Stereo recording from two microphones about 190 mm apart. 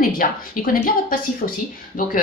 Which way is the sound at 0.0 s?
50° left (ahead or behind).